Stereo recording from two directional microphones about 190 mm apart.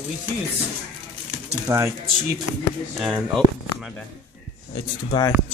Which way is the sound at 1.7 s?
15° right (ahead or behind).